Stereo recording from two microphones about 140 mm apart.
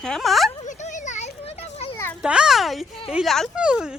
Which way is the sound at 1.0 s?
60° left (ahead or behind).